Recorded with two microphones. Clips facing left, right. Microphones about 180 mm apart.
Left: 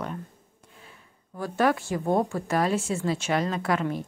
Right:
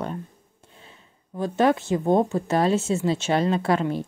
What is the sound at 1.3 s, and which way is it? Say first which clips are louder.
Speech: right 3 dB; 20° right (ahead or behind).